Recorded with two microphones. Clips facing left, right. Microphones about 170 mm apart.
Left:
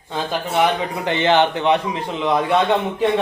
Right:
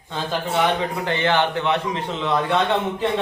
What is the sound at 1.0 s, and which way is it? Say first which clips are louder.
A man's voice: left 6 dB; 20° left (ahead or behind).